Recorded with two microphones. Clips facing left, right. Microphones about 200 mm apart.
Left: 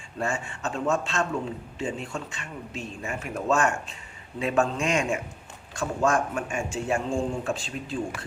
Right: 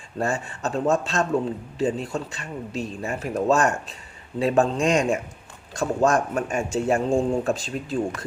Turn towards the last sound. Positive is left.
turn(degrees=-40)  # may be behind; listen again after turning